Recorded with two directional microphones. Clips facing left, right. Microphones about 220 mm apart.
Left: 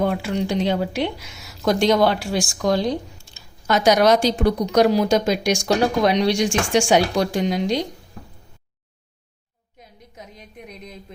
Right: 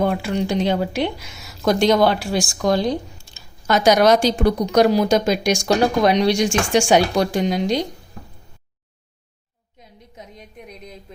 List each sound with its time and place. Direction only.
0.2 s speech: 45° right (ahead or behind)